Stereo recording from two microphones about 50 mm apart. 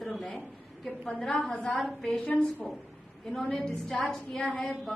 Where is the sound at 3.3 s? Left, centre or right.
Centre.